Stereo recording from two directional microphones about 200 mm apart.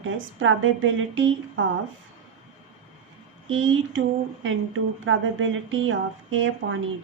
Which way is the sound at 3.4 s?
75° right (ahead or behind).